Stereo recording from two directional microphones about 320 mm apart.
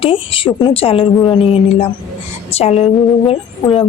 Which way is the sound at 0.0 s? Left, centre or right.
Centre.